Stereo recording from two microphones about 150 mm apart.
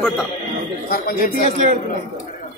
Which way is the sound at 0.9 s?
75° left (ahead or behind).